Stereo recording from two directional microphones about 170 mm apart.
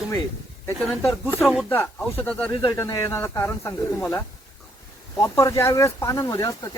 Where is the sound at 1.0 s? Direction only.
15° left (ahead or behind).